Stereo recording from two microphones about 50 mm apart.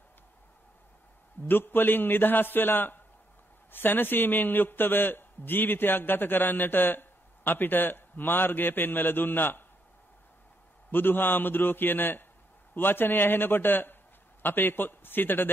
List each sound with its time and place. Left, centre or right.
1.5 s a man's voice: left
10.9 s a man's voice: left